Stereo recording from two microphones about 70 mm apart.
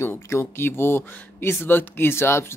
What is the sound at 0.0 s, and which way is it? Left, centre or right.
Speech, left.